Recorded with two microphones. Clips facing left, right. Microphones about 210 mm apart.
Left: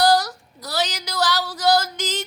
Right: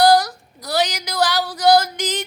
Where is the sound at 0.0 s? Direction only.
15° right (ahead or behind).